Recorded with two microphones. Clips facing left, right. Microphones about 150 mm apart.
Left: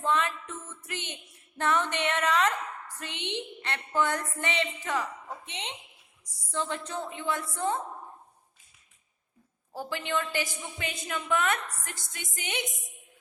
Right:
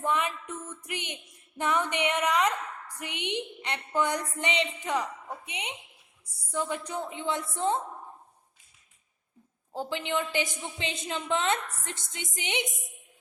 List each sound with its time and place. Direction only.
0.0 s a sound: 15° right (ahead or behind)
6.5 s a woman's voice: 10° right (ahead or behind)
9.7 s a woman's voice: 20° right (ahead or behind)